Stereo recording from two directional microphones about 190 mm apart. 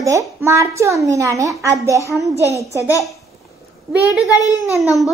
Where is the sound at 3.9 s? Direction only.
15° right (ahead or behind).